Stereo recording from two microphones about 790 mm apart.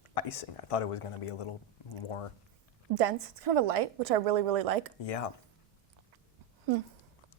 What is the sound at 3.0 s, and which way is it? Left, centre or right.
A woman's voice, right.